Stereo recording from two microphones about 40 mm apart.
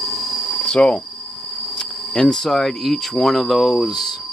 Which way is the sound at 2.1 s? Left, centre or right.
Centre.